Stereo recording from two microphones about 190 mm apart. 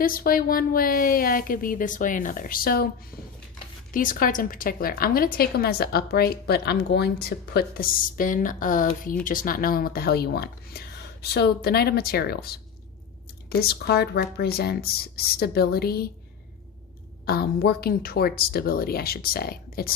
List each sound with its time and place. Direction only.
0.0 s a woman's voice: 50° left (ahead or behind)
17.2 s a woman's voice: 55° left (ahead or behind)